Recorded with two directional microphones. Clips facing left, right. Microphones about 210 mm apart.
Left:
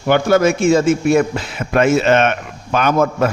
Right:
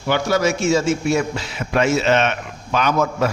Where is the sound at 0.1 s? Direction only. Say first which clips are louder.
Left 5 dB; 55° left (ahead or behind).